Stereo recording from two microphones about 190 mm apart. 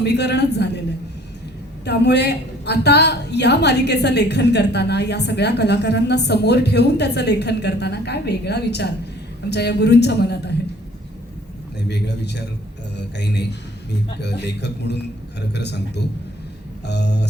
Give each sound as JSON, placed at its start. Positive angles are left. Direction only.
{"t": 0.0, "sound": "a woman's voice", "side_deg": 65}
{"t": 1.8, "sound": "a woman's voice", "side_deg": 65}
{"t": 11.9, "sound": "a woman's voice", "side_deg": 65}